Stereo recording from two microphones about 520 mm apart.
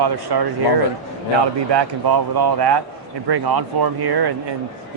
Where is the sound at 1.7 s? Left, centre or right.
Right.